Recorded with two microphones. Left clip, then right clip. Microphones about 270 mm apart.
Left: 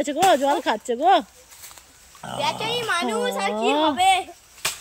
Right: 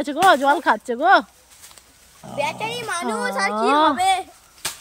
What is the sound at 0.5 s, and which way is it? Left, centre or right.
Speech, right.